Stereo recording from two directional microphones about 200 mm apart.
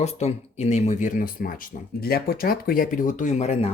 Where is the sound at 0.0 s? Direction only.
35° left (ahead or behind).